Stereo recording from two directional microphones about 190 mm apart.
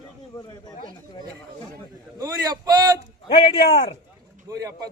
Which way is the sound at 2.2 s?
20° right (ahead or behind).